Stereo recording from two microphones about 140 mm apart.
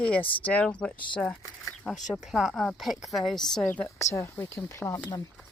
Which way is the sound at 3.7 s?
15° left (ahead or behind).